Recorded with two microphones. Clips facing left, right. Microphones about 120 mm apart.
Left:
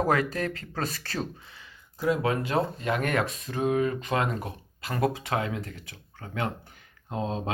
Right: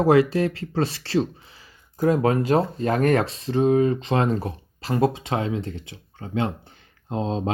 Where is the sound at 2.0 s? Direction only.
40° right (ahead or behind).